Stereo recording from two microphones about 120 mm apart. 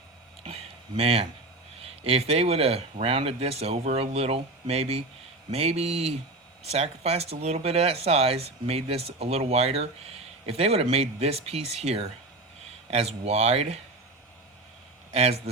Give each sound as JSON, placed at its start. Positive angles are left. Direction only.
{"t": 0.4, "sound": "a sound", "side_deg": -55}
{"t": 1.8, "sound": "speech", "side_deg": -55}
{"t": 15.1, "sound": "a man's voice", "side_deg": -60}